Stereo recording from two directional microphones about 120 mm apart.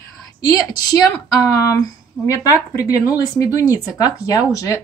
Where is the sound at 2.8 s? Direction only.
30° left (ahead or behind).